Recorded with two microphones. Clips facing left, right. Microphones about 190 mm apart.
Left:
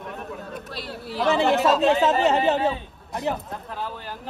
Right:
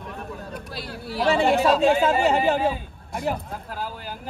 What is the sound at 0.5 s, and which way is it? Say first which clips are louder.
Speech: even; centre (ahead or behind).